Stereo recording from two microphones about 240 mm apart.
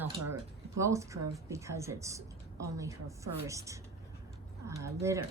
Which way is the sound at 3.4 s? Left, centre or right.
Centre.